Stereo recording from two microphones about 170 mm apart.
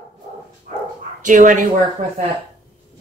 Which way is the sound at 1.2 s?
50° right (ahead or behind).